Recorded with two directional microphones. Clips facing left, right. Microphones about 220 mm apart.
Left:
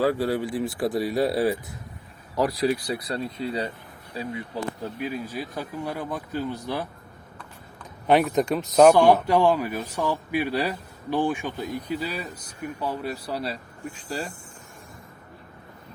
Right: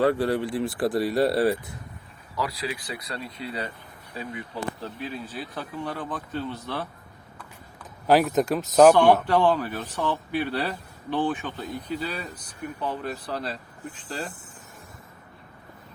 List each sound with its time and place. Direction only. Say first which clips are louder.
0.0 s speech: right 1 dB; centre (ahead or behind)
2.4 s speech: left 8 dB; 45° left (ahead or behind)
4.8 s a man's voice: left 4 dB; 10° left (ahead or behind)
7.8 s a man's voice: even; centre (ahead or behind)